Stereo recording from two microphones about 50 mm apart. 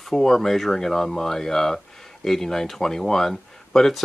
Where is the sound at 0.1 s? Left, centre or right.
Centre.